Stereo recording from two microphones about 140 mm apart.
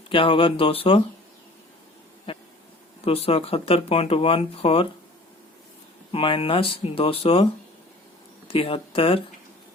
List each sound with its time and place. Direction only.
0.1 s speech: 40° left (ahead or behind)
2.3 s a sound: 40° left (ahead or behind)
3.0 s speech: 45° left (ahead or behind)
6.1 s speech: 40° left (ahead or behind)
8.4 s speech: 40° left (ahead or behind)